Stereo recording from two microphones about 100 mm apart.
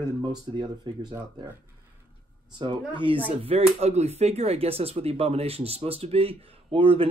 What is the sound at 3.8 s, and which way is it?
Speech, 90° right.